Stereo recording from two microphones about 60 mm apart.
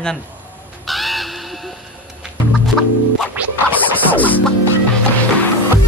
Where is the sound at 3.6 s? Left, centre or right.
Left.